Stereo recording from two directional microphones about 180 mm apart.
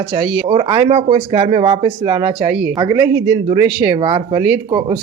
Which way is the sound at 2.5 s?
5° right (ahead or behind).